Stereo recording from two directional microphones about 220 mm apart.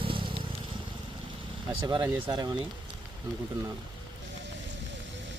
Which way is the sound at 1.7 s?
20° right (ahead or behind).